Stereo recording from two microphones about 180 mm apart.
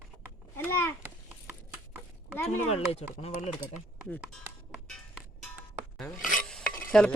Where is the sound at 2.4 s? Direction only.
35° left (ahead or behind).